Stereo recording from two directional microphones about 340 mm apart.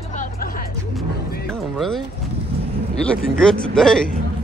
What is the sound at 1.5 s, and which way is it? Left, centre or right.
Music, centre.